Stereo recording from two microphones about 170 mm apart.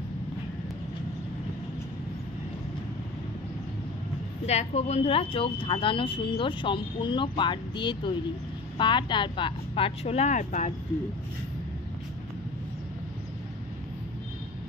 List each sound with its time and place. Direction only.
4.5 s speech: 40° left (ahead or behind)